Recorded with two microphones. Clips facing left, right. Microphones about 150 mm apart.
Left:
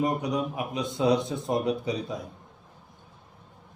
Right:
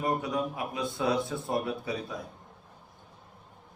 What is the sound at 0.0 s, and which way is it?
A man's voice, 15° left (ahead or behind).